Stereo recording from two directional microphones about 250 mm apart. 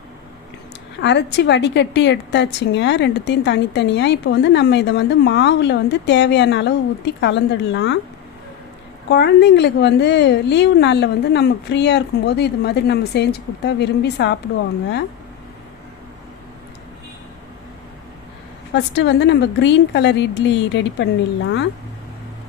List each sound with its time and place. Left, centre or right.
1.0 s a woman's voice: left
9.0 s a woman's voice: left
18.7 s a woman's voice: left